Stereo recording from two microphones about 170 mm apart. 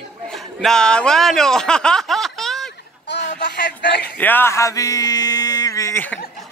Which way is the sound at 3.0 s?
90° left.